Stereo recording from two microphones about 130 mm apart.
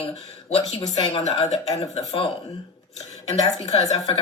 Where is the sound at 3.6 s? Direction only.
55° left (ahead or behind).